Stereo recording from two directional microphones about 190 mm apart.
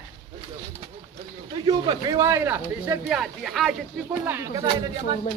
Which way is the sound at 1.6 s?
20° right (ahead or behind).